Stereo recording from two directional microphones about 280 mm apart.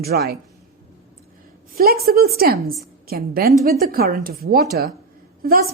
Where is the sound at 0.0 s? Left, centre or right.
Right.